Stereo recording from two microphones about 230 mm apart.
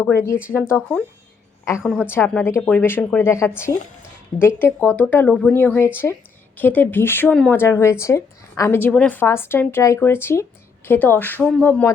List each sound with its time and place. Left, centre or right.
0.5 s a woman's voice: centre